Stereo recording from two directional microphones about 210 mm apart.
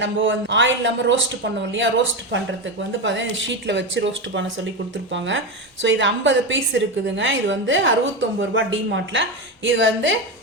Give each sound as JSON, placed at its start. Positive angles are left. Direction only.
{"t": 0.0, "sound": "a woman's voice", "side_deg": -60}
{"t": 3.0, "sound": "a woman's voice", "side_deg": -60}